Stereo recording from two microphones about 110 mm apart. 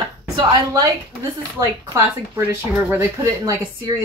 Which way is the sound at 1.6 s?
25° right (ahead or behind).